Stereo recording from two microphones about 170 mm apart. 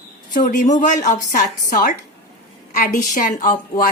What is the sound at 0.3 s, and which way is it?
A woman's voice, 50° left (ahead or behind).